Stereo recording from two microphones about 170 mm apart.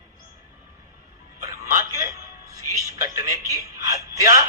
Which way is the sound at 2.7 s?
20° right (ahead or behind).